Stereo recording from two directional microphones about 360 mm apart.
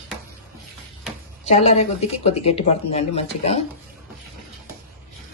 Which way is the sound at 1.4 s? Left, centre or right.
Centre.